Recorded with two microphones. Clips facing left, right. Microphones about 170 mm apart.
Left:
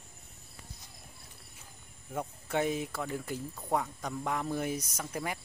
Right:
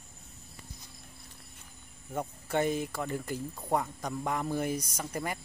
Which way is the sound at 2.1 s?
Centre (ahead or behind).